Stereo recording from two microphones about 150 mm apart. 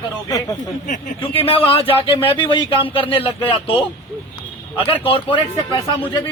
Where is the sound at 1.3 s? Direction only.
40° left (ahead or behind).